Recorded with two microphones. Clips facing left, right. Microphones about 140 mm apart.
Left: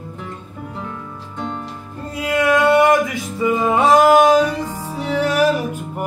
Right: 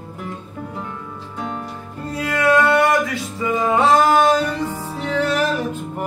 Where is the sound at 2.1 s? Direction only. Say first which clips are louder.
Even; 15° left (ahead or behind).